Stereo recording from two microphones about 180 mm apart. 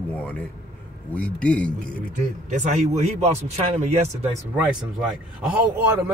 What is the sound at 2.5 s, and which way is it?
A man's voice, 40° right (ahead or behind).